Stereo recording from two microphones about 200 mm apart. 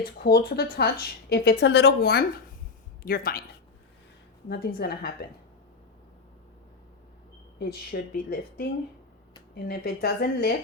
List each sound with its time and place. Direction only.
0.3 s a woman's voice: 50° left (ahead or behind)
4.4 s a woman's voice: 55° left (ahead or behind)
7.6 s a woman's voice: 50° left (ahead or behind)
9.6 s a woman's voice: 50° left (ahead or behind)